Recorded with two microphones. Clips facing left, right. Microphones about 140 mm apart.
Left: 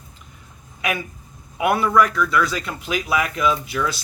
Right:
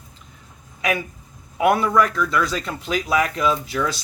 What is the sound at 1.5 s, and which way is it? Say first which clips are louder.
Speech: even; 40° right (ahead or behind).